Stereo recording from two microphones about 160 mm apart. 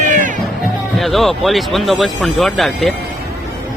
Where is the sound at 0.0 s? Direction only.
55° right (ahead or behind).